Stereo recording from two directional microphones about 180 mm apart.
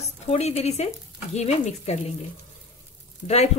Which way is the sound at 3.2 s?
35° left (ahead or behind).